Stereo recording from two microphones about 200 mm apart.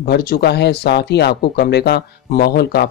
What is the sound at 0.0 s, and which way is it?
Speech, 50° left (ahead or behind).